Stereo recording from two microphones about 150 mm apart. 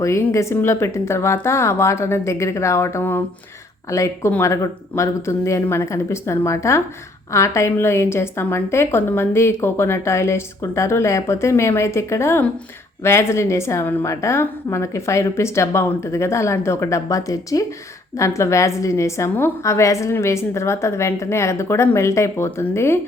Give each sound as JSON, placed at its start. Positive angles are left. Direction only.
{"t": 0.0, "sound": "a woman's voice", "side_deg": 20}